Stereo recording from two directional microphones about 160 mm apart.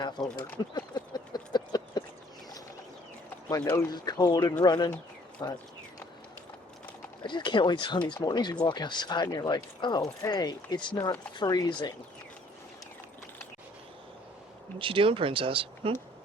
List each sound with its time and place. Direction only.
0.0 s speech: 25° left (ahead or behind)
0.6 s a sound: 25° left (ahead or behind)
3.9 s speech: 25° left (ahead or behind)
7.2 s speech: 30° left (ahead or behind)
14.8 s speech: 35° right (ahead or behind)